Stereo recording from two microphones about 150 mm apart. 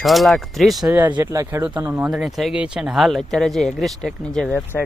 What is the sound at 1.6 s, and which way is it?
Speech, 10° right (ahead or behind).